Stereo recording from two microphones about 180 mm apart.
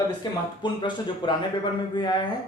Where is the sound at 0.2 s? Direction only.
25° left (ahead or behind).